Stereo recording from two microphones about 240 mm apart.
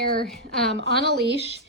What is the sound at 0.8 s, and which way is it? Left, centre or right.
Speech, right.